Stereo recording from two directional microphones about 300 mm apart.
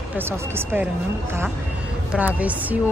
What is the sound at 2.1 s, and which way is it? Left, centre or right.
Speech, centre.